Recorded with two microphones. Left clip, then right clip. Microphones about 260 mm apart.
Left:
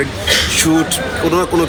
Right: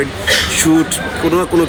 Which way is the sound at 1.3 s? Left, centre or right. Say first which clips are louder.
Right 1 dB; centre.